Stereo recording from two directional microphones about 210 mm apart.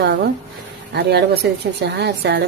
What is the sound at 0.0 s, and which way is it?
Speech, 55° right (ahead or behind).